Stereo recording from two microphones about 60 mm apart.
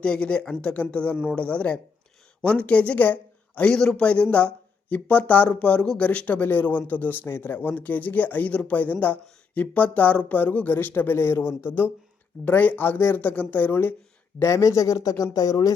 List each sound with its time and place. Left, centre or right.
0.0 s speech: centre
1.1 s speech: centre
1.4 s speech: centre; by 11.9 s left
12.5 s speech: left
14.3 s speech: left